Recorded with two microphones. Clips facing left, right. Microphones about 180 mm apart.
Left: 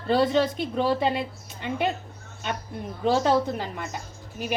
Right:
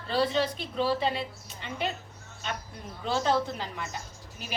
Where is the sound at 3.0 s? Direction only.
50° left (ahead or behind).